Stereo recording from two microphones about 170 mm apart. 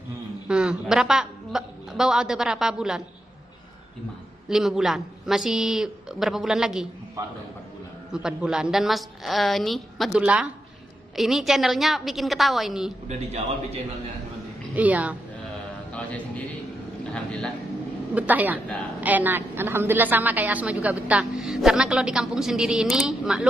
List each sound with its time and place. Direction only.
0.5 s a woman's voice: 5° right (ahead or behind)
4.5 s a woman's voice: 5° right (ahead or behind)
8.1 s a woman's voice: 5° right (ahead or behind)
13.1 s a man's voice: 40° right (ahead or behind)
14.8 s a woman's voice: 10° right (ahead or behind)
15.9 s a sound: 5° left (ahead or behind)
17.0 s a man's voice: 5° left (ahead or behind)
18.1 s a woman's voice: 10° right (ahead or behind)